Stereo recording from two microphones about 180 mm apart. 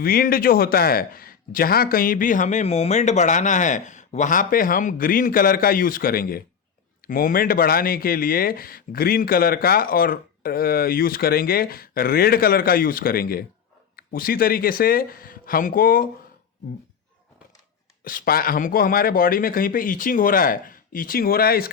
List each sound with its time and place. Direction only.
0.0 s a man's voice: 55° left (ahead or behind)
18.0 s a man's voice: 50° left (ahead or behind)